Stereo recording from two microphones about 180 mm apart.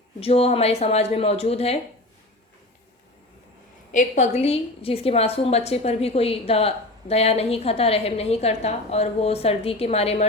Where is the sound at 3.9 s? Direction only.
40° left (ahead or behind).